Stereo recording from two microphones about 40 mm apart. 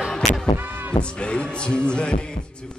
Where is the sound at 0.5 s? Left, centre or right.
Right.